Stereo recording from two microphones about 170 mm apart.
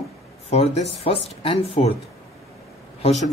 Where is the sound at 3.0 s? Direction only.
40° left (ahead or behind).